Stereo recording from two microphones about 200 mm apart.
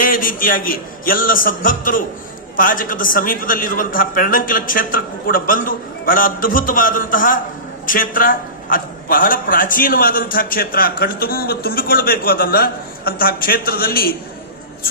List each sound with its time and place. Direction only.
0.0 s a man's voice: 45° left (ahead or behind)